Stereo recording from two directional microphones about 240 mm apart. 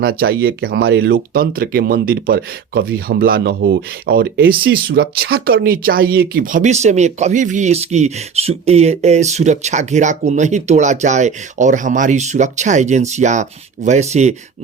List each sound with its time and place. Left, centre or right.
0.0 s speech: right